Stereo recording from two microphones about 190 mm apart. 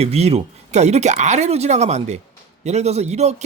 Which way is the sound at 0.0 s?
35° right (ahead or behind).